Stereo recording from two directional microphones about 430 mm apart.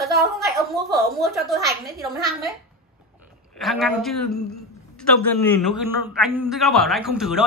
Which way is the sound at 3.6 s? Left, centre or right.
Centre.